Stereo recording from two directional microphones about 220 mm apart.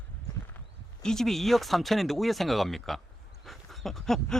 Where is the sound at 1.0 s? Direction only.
Centre (ahead or behind).